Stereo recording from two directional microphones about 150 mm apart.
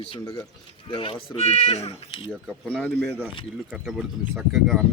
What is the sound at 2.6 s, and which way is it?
Speech, 10° left (ahead or behind).